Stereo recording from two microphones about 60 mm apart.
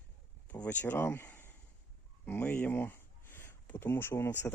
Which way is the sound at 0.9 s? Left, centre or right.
Left.